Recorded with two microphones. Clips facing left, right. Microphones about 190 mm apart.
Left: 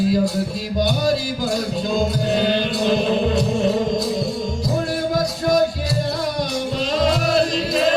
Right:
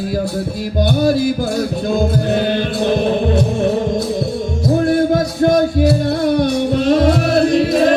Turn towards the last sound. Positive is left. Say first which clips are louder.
# right 6 dB
turn(degrees=-60)  # may be behind; listen again after turning